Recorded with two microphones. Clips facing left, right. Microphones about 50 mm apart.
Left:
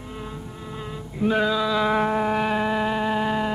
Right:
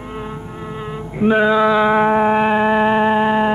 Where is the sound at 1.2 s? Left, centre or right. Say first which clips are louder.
Right 8 dB; right.